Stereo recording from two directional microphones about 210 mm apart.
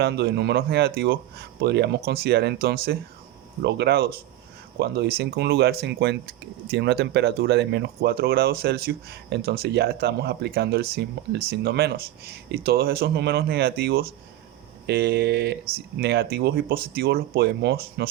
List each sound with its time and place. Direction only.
0.0 s speech: 50° right (ahead or behind)